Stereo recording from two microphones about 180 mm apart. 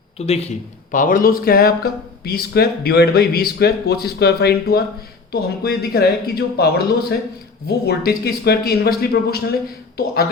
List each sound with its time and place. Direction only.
0.2 s speech: 35° left (ahead or behind); by 9.4 s 60° left (ahead or behind)